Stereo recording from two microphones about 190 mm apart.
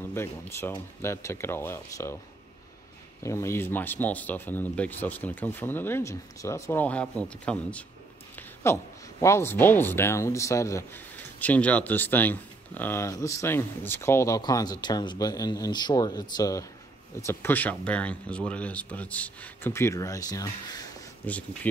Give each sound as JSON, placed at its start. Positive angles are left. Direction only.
{"t": 0.1, "sound": "speech", "side_deg": 10}
{"t": 3.2, "sound": "speech", "side_deg": 15}